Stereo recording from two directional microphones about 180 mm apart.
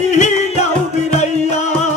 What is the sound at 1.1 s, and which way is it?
Music, 40° left (ahead or behind).